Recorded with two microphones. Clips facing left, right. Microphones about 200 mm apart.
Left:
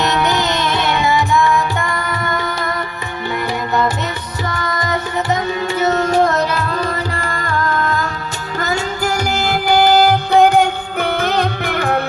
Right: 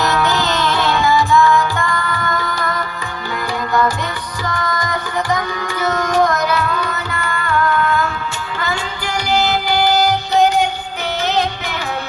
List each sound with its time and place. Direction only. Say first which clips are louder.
0.0 s music: even; 20° left (ahead or behind)
4.4 s music: even; 25° left (ahead or behind); by 12.0 s 55° left (ahead or behind)